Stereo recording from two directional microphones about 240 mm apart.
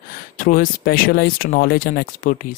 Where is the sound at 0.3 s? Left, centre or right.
Left.